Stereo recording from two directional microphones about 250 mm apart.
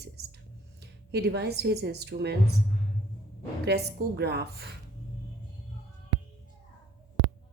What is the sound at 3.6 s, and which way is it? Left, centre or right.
Speech, right.